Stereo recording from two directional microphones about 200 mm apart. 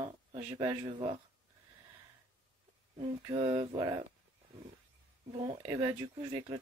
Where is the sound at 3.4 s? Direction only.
25° right (ahead or behind).